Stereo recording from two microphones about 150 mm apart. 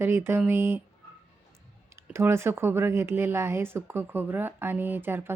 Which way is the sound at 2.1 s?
15° right (ahead or behind).